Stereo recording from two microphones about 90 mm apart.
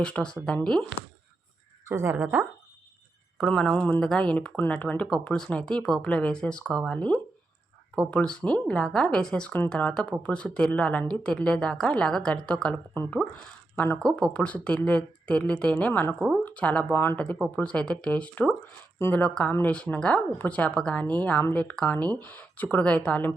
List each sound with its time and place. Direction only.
0.0 s speech: 10° left (ahead or behind)
1.9 s speech: 30° right (ahead or behind)
3.3 s speech: 5° left (ahead or behind)
12.9 s speech: 20° left (ahead or behind)
14.1 s speech: 10° left (ahead or behind)
16.9 s speech: 25° left (ahead or behind)
17.6 s speech: 10° left (ahead or behind)